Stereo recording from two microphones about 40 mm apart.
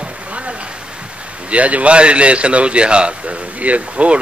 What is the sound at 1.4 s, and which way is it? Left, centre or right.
Speech, right.